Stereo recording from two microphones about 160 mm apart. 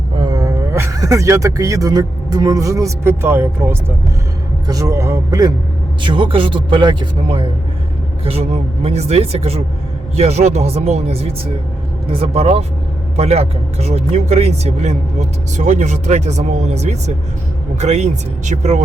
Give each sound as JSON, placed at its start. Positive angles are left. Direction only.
{"t": 0.2, "sound": "a man's voice", "side_deg": -25}